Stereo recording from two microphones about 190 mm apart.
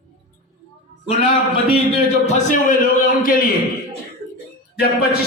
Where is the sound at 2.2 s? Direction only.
35° left (ahead or behind).